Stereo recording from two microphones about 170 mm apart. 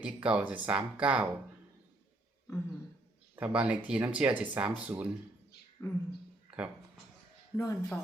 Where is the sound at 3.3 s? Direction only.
10° right (ahead or behind).